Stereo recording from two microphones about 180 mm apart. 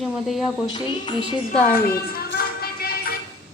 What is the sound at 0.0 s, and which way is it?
Speech, centre (ahead or behind).